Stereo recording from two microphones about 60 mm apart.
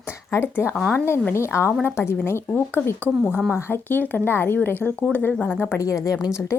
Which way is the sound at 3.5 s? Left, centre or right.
Left.